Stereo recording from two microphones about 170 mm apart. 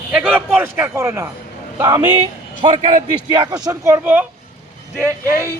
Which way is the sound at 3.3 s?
25° right (ahead or behind).